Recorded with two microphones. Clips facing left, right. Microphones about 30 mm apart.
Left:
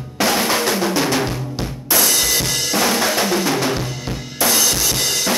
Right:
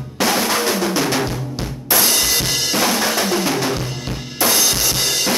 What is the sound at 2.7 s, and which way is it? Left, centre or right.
Drum, centre.